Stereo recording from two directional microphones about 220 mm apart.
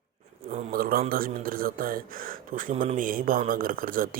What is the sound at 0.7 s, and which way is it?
Speech, 40° right (ahead or behind).